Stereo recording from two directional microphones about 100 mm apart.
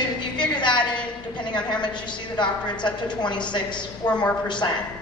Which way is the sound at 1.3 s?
50° left (ahead or behind).